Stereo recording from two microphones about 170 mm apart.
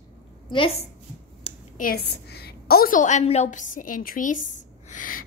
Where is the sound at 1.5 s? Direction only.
35° left (ahead or behind).